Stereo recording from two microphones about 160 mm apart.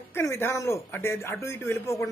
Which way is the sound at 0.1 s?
15° left (ahead or behind).